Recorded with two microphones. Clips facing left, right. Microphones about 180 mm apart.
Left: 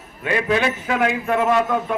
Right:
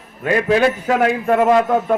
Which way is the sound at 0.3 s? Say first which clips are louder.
Right 5 dB; 45° right (ahead or behind).